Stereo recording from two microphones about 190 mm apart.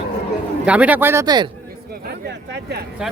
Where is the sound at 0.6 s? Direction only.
5° right (ahead or behind).